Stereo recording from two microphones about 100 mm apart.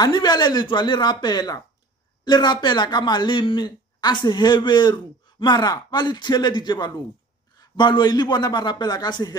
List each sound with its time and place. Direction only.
0.0 s speech: 45° left (ahead or behind)